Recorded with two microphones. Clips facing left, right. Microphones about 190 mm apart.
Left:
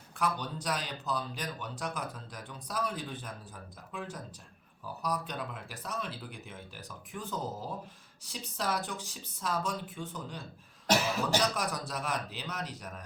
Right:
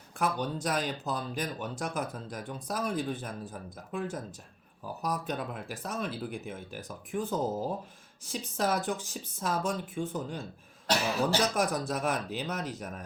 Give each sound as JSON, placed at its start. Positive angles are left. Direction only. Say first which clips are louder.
{"t": 0.2, "sound": "speech", "louder": "right 3 dB", "side_deg": -50}
{"t": 11.5, "sound": "speech", "louder": "right 6 dB", "side_deg": -50}